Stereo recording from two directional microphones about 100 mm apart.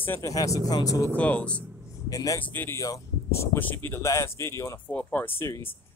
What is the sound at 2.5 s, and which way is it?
Speech, 20° left (ahead or behind).